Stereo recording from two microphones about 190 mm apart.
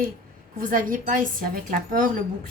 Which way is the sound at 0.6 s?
45° right (ahead or behind).